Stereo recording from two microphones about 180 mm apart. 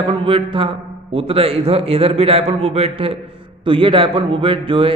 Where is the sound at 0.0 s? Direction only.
30° right (ahead or behind).